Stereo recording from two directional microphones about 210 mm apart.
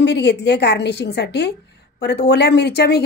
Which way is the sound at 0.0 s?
55° left (ahead or behind).